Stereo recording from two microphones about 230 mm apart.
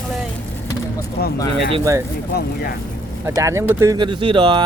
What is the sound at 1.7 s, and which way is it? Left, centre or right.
Speech, centre.